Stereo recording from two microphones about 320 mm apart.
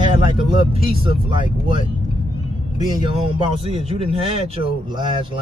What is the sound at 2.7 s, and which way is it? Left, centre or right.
Speech, centre.